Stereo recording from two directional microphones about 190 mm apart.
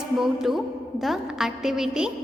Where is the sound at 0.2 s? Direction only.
Centre (ahead or behind).